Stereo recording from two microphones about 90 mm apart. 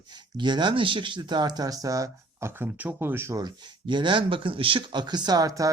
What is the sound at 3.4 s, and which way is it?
Speech, 55° right (ahead or behind).